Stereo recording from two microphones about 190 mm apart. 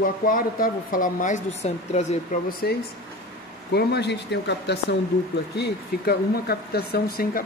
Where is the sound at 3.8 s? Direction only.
60° left (ahead or behind).